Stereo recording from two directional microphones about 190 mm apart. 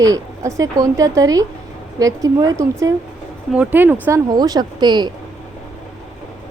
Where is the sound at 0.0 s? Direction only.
15° right (ahead or behind).